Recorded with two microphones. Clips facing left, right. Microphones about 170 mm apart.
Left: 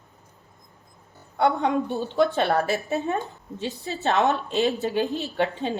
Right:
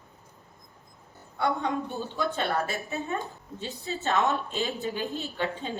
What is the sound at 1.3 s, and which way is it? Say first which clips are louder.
Speech: left 6 dB; 70° left (ahead or behind).